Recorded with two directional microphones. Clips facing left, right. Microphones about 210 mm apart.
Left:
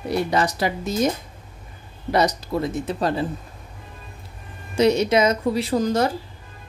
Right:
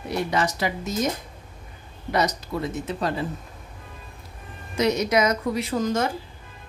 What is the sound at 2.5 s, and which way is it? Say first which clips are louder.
Speech: left 4 dB; 35° left (ahead or behind).